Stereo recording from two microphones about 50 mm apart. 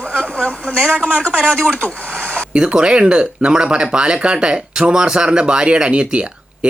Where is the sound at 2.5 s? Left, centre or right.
Centre.